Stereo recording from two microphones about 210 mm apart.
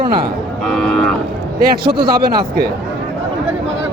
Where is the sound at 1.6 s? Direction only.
45° right (ahead or behind).